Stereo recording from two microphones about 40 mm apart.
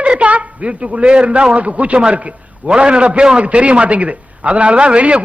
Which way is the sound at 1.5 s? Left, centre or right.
Right.